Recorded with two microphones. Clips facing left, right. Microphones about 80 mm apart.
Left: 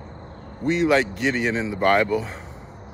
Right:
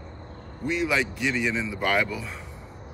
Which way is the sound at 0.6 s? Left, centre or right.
Left.